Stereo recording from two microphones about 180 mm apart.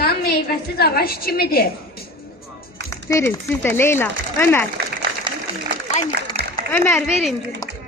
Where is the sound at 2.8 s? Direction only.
15° left (ahead or behind).